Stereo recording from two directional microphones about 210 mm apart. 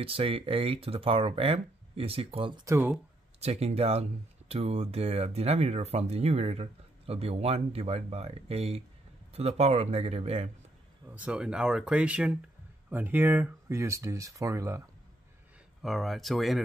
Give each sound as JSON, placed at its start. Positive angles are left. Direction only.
{"t": 0.0, "sound": "speech", "side_deg": -25}
{"t": 3.3, "sound": "speech", "side_deg": -30}
{"t": 11.1, "sound": "speech", "side_deg": -5}
{"t": 15.8, "sound": "speech", "side_deg": 0}